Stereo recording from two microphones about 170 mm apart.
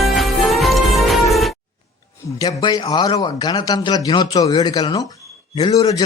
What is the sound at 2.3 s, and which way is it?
A man's voice, 20° left (ahead or behind).